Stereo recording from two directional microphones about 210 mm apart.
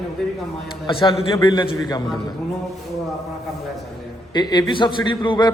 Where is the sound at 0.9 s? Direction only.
25° left (ahead or behind).